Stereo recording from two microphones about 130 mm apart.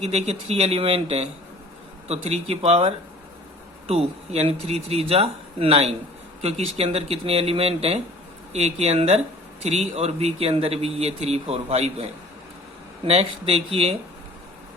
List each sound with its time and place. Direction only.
0.0 s a man's voice: 55° right (ahead or behind)
13.1 s a man's voice: 50° right (ahead or behind)